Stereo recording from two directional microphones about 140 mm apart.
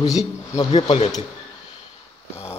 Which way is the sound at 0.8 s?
40° left (ahead or behind).